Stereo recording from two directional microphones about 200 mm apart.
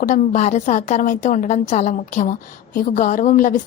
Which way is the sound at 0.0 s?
40° left (ahead or behind).